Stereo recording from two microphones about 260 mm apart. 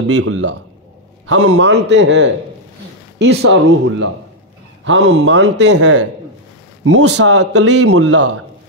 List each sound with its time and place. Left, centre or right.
0.0 s a man's voice: right
7.2 s speech: right
8.0 s a man's voice: right